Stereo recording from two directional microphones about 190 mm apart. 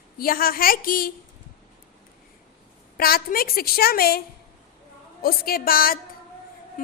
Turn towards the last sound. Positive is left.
turn(degrees=45)  # may be behind; listen again after turning